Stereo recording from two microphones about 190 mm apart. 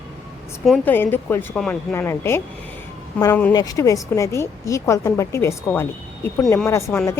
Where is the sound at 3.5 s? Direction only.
20° left (ahead or behind).